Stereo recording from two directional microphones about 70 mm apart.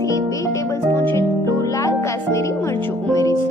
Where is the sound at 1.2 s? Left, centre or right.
Left.